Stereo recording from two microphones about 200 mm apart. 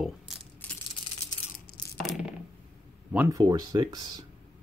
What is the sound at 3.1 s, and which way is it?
Speech, 10° right (ahead or behind).